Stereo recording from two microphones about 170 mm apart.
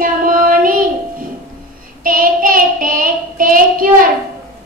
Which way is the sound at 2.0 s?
55° right (ahead or behind).